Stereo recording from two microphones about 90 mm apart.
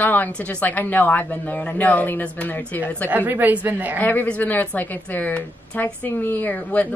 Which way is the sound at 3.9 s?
20° left (ahead or behind).